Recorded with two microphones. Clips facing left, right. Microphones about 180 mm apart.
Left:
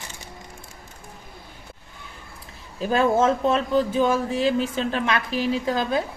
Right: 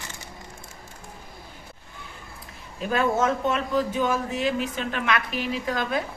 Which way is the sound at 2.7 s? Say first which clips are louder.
Left 4 dB; 30° left (ahead or behind).